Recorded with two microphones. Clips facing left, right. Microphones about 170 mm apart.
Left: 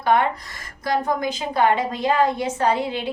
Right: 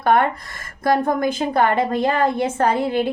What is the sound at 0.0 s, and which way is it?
A woman's voice, 50° right (ahead or behind).